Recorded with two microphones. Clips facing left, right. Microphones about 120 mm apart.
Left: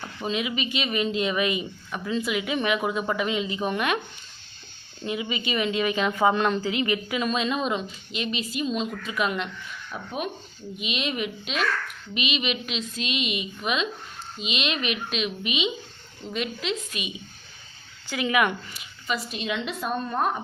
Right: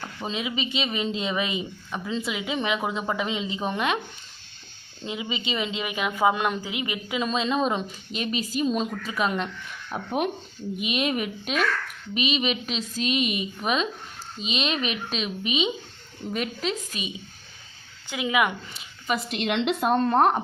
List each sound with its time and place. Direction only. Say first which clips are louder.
0.3 s a woman's voice: left 2 dB; 30° right (ahead or behind)
5.0 s a woman's voice: left 2 dB; 20° right (ahead or behind)
9.9 s a woman's voice: right 5 dB; 55° right (ahead or behind); by 17.1 s 40° right (ahead or behind)
18.1 s a woman's voice: left 1 dB; 20° right (ahead or behind)
19.3 s a woman's voice: right 5 dB; 70° right (ahead or behind)